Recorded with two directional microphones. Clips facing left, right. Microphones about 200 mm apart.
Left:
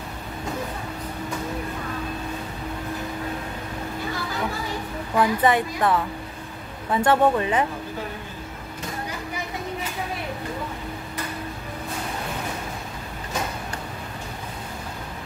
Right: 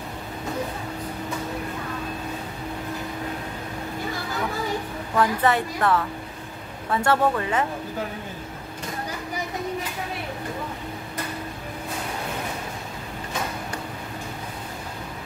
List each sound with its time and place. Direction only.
5.1 s speech: 15° left (ahead or behind)